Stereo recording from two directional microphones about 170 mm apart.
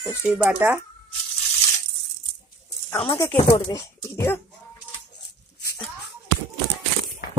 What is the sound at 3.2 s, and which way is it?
Speech, 15° left (ahead or behind).